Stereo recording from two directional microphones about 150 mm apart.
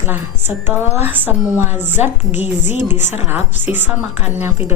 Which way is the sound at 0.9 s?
45° left (ahead or behind).